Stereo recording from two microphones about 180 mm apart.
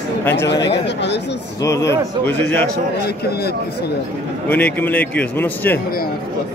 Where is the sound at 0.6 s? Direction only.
75° left (ahead or behind).